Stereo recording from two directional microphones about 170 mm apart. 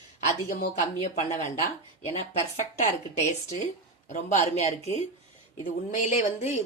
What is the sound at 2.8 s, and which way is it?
Speech, 45° left (ahead or behind).